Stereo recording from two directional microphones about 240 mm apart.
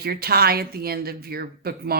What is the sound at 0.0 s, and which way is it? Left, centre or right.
A woman's voice, right.